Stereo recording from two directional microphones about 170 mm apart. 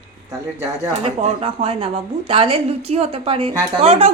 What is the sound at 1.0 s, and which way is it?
A woman's voice, 35° right (ahead or behind).